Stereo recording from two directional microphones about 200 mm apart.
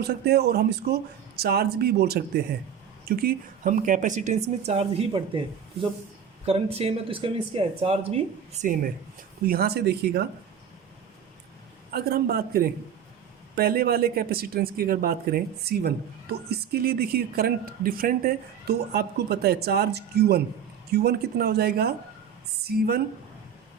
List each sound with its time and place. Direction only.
0.0 s a woman's voice: 55° right (ahead or behind); by 5.4 s 25° right (ahead or behind)
6.4 s speech: 30° right (ahead or behind)
9.4 s a woman's voice: 50° right (ahead or behind)
11.9 s a woman's voice: 50° right (ahead or behind)